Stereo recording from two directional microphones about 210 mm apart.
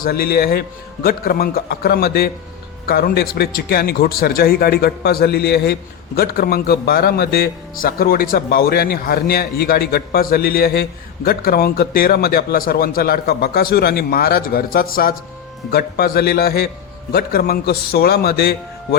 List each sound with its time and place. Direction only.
0.0 s a man's voice: 45° left (ahead or behind)